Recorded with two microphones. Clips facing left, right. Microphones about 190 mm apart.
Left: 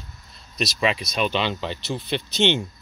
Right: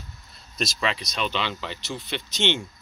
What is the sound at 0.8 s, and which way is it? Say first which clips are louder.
Speech: left 6 dB; 10° left (ahead or behind).